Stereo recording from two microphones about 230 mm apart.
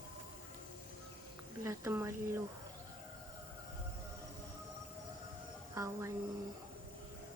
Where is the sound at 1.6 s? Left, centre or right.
Centre.